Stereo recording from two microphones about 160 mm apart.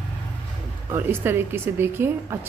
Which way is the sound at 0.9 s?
15° right (ahead or behind).